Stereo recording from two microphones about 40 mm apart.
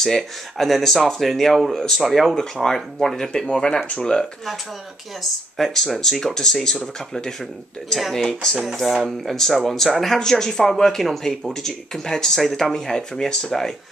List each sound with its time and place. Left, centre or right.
0.0 s speech: centre
5.6 s speech: centre
8.8 s speech: centre
11.6 s speech: centre